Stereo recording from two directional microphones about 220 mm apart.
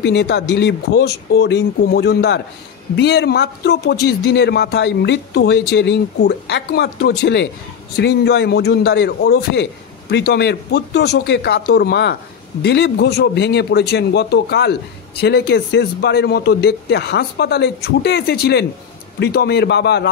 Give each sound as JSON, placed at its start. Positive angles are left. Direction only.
{"t": 0.0, "sound": "speech", "side_deg": 50}